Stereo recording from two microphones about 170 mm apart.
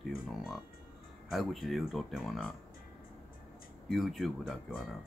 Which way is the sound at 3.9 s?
Centre (ahead or behind).